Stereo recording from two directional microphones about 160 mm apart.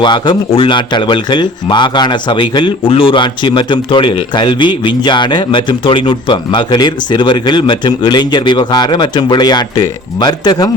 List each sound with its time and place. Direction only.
0.0 s speech: 30° left (ahead or behind)